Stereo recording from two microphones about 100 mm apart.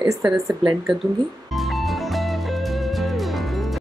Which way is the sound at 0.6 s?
60° right (ahead or behind).